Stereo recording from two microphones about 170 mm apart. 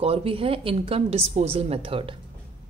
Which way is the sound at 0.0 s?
35° right (ahead or behind).